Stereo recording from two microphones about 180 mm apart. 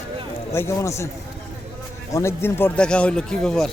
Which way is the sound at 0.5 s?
15° left (ahead or behind).